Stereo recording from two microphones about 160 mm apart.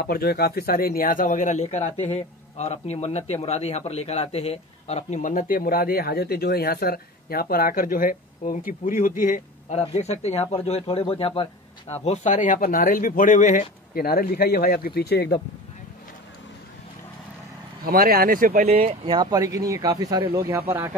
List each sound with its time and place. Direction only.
0.0 s speech: 75° left (ahead or behind); by 9.4 s 55° left (ahead or behind)
9.7 s speech: 40° left (ahead or behind); by 15.4 s 90° left
17.8 s speech: 65° right (ahead or behind)
19.0 s speech: 25° right (ahead or behind)